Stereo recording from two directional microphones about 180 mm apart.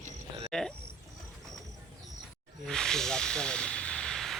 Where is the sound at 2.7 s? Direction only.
5° left (ahead or behind).